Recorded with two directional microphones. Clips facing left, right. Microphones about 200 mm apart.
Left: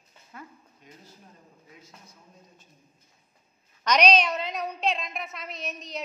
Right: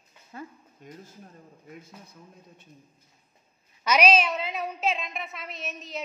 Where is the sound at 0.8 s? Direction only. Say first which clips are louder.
Right 8 dB; 50° right (ahead or behind).